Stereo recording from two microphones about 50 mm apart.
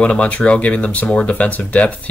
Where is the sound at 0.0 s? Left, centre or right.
Left.